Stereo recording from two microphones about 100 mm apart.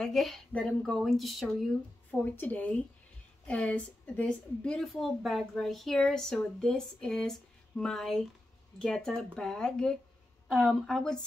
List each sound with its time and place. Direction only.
0.0 s a woman's voice: centre (ahead or behind)
2.0 s a woman's voice: 20° left (ahead or behind)